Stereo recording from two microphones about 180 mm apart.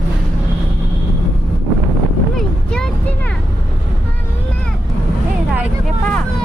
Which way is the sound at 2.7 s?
5° left (ahead or behind).